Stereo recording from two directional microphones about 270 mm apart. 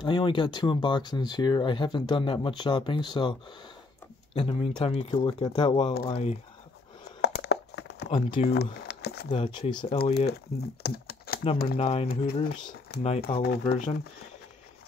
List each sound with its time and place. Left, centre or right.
0.0 s speech: centre
7.2 s crumpling: left
8.1 s speech: left
8.8 s a sound: left
9.3 s speech: centre
10.8 s computer keyboard: left
11.6 s speech: left
12.9 s speech: left
13.3 s speech: centre